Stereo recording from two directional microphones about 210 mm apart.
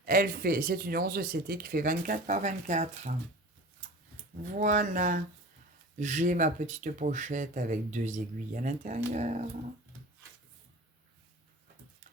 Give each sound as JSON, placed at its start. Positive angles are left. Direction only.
{"t": 0.0, "sound": "speech", "side_deg": -45}
{"t": 4.5, "sound": "speech", "side_deg": -35}